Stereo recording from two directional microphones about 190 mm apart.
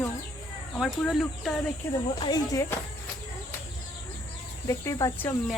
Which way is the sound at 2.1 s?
20° left (ahead or behind).